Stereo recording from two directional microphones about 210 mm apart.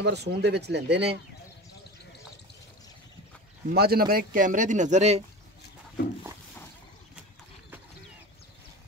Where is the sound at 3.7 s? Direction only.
45° right (ahead or behind).